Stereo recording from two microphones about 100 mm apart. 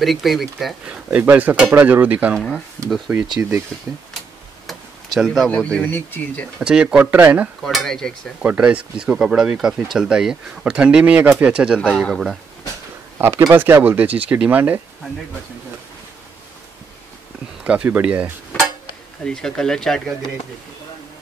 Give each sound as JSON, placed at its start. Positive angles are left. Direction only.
{"t": 0.0, "sound": "speech", "side_deg": 0}
{"t": 0.8, "sound": "speech", "side_deg": -15}
{"t": 2.3, "sound": "speech", "side_deg": 0}
{"t": 3.3, "sound": "speech", "side_deg": -25}
{"t": 4.6, "sound": "a sound", "side_deg": 0}
{"t": 5.5, "sound": "speech", "side_deg": 15}
{"t": 6.6, "sound": "speech", "side_deg": -10}
{"t": 7.6, "sound": "speech", "side_deg": 5}
{"t": 8.4, "sound": "speech", "side_deg": -10}
{"t": 13.2, "sound": "speech", "side_deg": -30}
{"t": 17.6, "sound": "speech", "side_deg": -15}
{"t": 19.2, "sound": "speech", "side_deg": 5}